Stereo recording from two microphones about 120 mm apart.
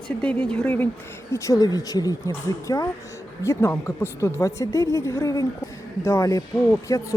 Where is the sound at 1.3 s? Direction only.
25° left (ahead or behind).